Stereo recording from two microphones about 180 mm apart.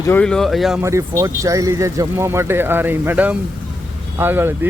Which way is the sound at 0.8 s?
15° right (ahead or behind).